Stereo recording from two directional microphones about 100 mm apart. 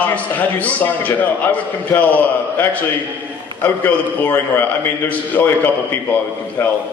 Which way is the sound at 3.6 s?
20° left (ahead or behind).